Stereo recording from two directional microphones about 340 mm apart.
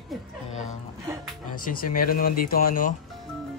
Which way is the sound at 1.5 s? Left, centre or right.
Left.